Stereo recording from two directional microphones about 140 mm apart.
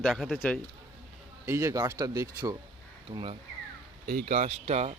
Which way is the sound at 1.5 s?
20° right (ahead or behind).